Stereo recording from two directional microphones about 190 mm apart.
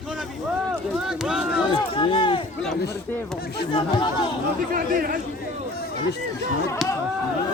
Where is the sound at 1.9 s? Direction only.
25° left (ahead or behind).